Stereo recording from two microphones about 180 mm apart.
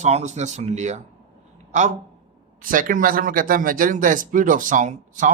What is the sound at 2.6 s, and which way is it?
Speech, 50° right (ahead or behind).